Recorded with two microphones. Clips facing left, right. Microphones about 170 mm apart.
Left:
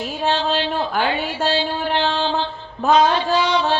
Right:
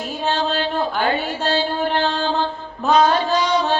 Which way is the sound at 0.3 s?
45° right (ahead or behind).